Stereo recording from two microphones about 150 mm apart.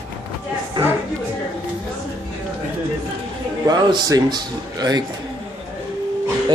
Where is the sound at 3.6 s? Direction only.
25° right (ahead or behind).